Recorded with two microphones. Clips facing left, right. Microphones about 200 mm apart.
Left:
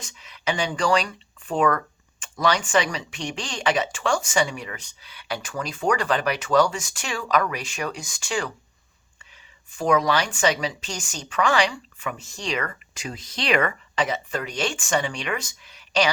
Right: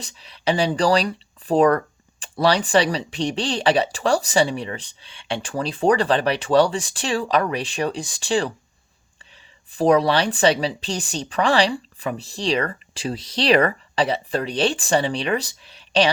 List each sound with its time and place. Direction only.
0.0 s speech: 35° right (ahead or behind)
9.7 s speech: 35° right (ahead or behind)